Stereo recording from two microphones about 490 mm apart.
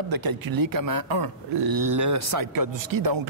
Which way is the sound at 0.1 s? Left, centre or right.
Right.